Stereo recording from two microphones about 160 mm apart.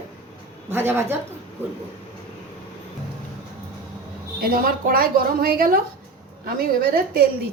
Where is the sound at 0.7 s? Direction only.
15° right (ahead or behind).